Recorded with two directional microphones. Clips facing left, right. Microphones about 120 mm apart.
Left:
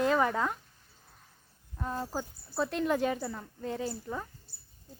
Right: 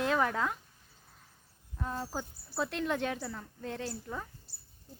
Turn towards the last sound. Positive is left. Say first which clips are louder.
# left 3 dB
turn(degrees=5)  # may be behind; listen again after turning